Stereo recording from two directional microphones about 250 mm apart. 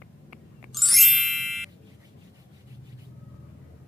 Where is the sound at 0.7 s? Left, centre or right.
Centre.